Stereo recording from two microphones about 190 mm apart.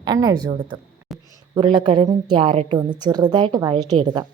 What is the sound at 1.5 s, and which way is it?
A woman's voice, 25° right (ahead or behind).